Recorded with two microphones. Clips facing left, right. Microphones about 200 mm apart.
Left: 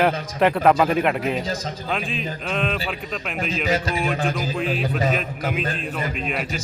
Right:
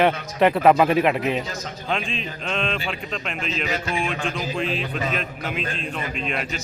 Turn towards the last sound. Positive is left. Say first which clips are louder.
# left 2 dB
turn(degrees=50)  # may be behind; listen again after turning